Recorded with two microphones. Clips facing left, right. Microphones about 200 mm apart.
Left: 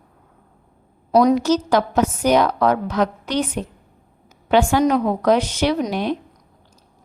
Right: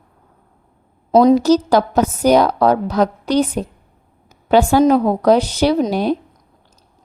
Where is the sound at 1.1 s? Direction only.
30° right (ahead or behind).